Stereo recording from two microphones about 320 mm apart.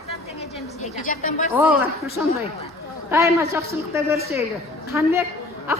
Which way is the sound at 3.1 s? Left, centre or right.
Centre.